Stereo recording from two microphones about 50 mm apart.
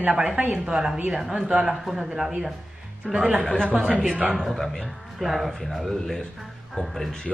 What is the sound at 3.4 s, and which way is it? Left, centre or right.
Speech, centre.